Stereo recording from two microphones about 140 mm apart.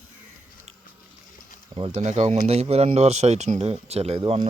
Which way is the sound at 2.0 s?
55° right (ahead or behind).